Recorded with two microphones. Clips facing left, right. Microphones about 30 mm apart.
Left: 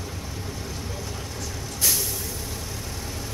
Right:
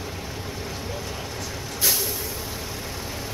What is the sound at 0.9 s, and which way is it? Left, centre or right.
Vehicle, centre.